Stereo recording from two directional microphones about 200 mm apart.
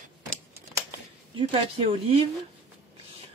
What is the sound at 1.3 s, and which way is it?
Speech, 30° right (ahead or behind).